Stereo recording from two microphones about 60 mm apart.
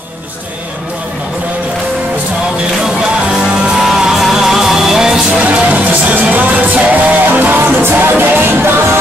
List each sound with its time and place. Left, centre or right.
3.8 s music: centre; by 8.7 s right